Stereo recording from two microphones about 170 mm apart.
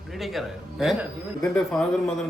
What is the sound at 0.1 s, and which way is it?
Speech, centre (ahead or behind).